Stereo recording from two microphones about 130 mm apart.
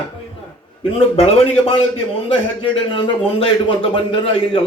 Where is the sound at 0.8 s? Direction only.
45° left (ahead or behind).